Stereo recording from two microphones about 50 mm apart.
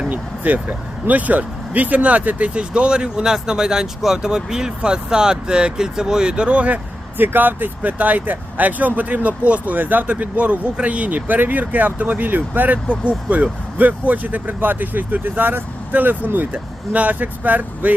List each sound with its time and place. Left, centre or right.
0.1 s speech: right
7.2 s speech: right